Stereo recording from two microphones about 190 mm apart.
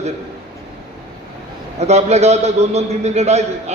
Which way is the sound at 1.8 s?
35° right (ahead or behind).